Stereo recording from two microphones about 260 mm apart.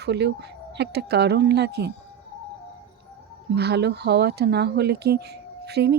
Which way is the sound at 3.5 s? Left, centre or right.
Right.